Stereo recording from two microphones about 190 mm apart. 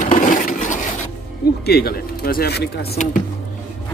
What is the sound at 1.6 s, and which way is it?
Speech, 55° left (ahead or behind).